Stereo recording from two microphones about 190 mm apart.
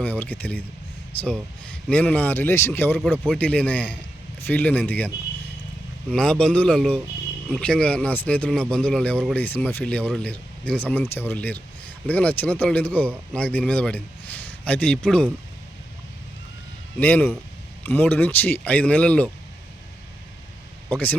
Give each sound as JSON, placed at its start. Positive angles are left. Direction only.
{"t": 0.0, "sound": "a man's voice", "side_deg": 10}
{"t": 17.0, "sound": "speech", "side_deg": 10}
{"t": 20.9, "sound": "speech", "side_deg": 10}